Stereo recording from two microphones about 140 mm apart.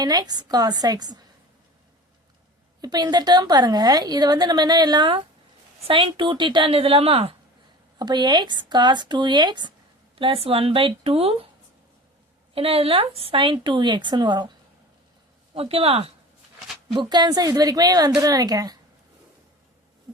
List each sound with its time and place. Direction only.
0.0 s a woman's voice: 30° right (ahead or behind)
2.8 s a woman's voice: 30° right (ahead or behind)
7.9 s speech: 30° right (ahead or behind)
12.5 s speech: 45° right (ahead or behind)
15.5 s speech: 45° right (ahead or behind)
16.9 s a woman's voice: 35° right (ahead or behind)